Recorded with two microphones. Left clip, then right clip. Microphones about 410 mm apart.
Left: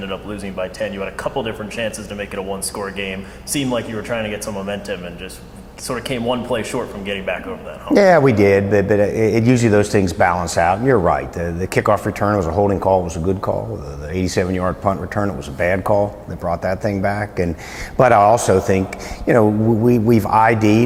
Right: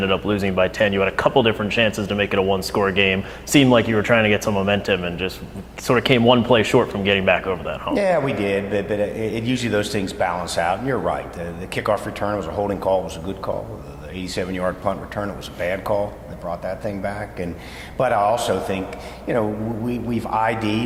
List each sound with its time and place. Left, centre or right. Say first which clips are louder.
0.0 s speech: right 7 dB; right
7.9 s a man's voice: left 9 dB; left
14.6 s speech: left 3 dB; left
15.1 s speech: left 5 dB; left
16.5 s a man's voice: left 6 dB; left